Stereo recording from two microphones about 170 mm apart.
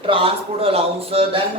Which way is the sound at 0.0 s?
30° right (ahead or behind).